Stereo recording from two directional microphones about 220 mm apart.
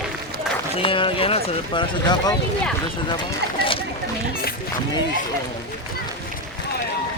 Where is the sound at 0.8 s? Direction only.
25° left (ahead or behind).